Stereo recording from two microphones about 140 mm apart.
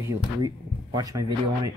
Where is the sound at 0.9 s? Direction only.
25° right (ahead or behind).